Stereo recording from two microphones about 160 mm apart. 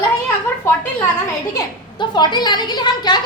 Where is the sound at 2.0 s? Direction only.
30° left (ahead or behind).